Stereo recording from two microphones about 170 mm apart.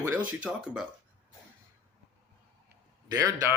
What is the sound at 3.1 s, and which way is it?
Speech, 20° right (ahead or behind).